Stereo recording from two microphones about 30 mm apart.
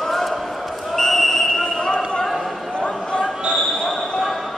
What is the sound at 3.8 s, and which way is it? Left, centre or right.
Basketball bounce, centre.